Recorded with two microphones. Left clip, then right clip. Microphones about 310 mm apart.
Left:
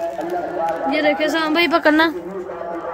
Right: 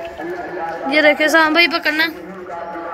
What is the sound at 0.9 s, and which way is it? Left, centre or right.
A woman's voice, centre.